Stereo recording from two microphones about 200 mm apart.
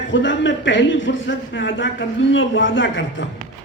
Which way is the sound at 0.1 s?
70° left (ahead or behind).